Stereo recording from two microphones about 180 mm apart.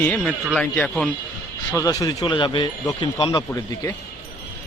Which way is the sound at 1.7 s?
20° left (ahead or behind).